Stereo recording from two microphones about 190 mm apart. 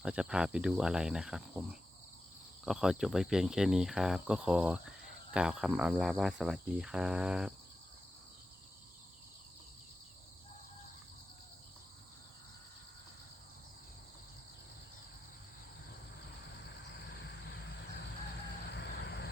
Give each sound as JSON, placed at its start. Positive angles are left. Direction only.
{"t": 0.0, "sound": "cricket", "side_deg": -5}
{"t": 2.6, "sound": "cricket", "side_deg": -5}
{"t": 16.9, "sound": "vehicle", "side_deg": 60}